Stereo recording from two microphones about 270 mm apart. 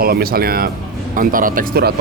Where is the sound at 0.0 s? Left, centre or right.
Right.